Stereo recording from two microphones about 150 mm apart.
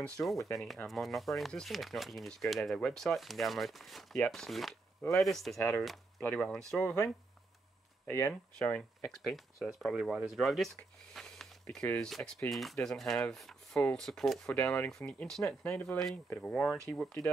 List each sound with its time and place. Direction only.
0.2 s speech: 10° left (ahead or behind)
0.8 s speech: centre (ahead or behind)
8.1 s speech: 15° left (ahead or behind)